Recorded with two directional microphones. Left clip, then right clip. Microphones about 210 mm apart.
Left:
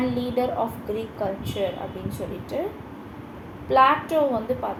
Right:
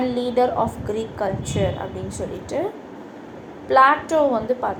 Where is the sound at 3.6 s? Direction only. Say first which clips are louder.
Right 3 dB; 20° right (ahead or behind).